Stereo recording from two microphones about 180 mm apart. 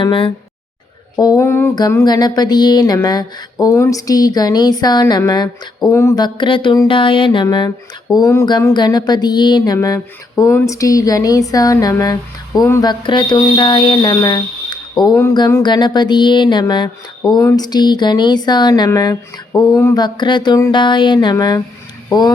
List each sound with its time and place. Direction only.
0.0 s speech: 25° left (ahead or behind)
1.1 s a sound: 20° left (ahead or behind)
1.7 s speech: 20° left (ahead or behind)